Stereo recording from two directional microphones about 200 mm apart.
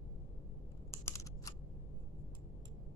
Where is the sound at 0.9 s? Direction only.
15° left (ahead or behind).